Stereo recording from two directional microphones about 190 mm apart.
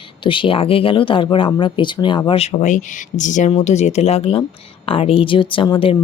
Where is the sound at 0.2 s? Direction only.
25° left (ahead or behind).